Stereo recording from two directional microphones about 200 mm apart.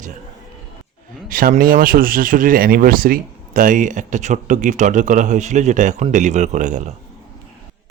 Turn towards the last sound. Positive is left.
turn(degrees=-35)  # may be behind; listen again after turning